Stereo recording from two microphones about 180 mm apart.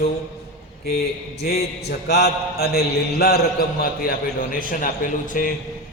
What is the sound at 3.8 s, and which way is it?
A man's voice, 55° left (ahead or behind).